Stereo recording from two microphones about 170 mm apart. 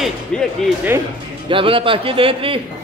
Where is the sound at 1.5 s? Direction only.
30° right (ahead or behind).